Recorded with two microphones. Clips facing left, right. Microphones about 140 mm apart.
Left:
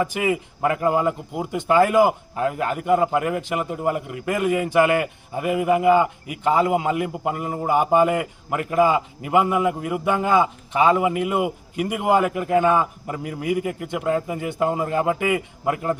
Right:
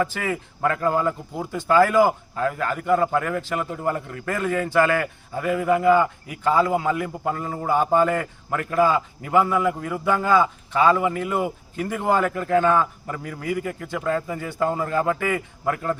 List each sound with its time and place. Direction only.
0.0 s speech: 15° left (ahead or behind)